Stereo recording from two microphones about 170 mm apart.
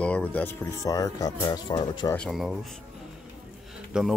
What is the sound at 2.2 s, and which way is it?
Speech, centre (ahead or behind).